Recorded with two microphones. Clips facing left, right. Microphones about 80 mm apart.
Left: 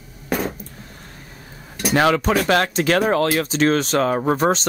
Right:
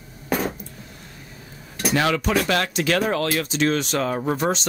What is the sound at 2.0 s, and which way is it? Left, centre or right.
Speech, left.